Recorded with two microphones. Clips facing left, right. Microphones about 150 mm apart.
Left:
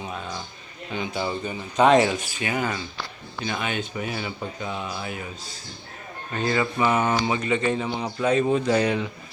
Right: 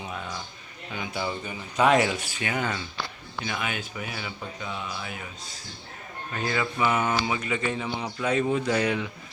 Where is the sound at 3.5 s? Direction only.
25° left (ahead or behind).